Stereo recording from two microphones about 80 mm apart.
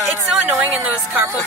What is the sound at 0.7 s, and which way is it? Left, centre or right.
Music, right.